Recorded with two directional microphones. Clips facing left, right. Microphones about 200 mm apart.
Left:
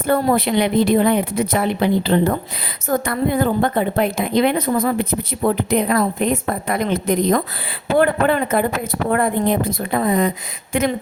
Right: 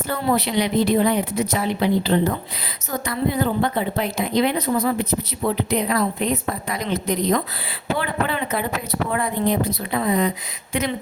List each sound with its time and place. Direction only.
0.1 s a woman's voice: 50° left (ahead or behind)